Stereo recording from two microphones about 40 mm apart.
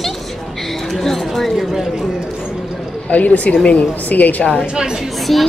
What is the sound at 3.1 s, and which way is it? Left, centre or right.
A woman's voice, left.